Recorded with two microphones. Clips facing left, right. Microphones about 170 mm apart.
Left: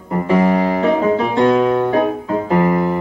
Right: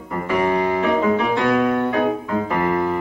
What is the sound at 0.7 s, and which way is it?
Piano, 30° left (ahead or behind).